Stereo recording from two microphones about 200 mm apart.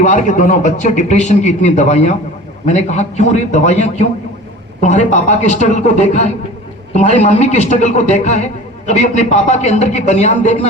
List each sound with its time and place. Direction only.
0.0 s speech: 40° left (ahead or behind)